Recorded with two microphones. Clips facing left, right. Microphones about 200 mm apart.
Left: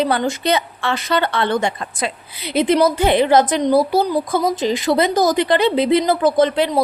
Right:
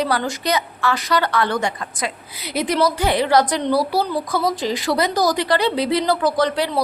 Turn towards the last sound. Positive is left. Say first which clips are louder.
# left 4 dB
turn(degrees=20)  # may be behind; listen again after turning